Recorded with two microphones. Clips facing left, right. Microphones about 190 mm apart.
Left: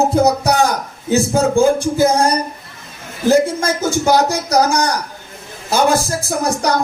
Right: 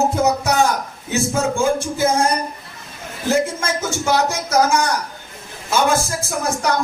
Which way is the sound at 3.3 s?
35° left (ahead or behind).